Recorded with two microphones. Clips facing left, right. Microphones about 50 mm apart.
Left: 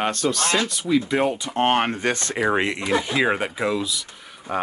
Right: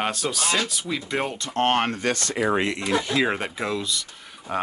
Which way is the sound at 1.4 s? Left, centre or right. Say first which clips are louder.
Left 2 dB; centre.